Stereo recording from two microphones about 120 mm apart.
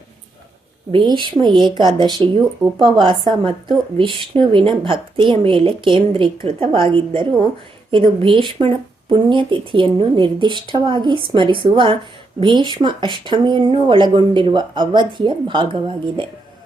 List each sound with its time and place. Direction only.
1.0 s speech: 40° right (ahead or behind)
2.6 s speech: centre (ahead or behind)
3.0 s speech: 40° right (ahead or behind)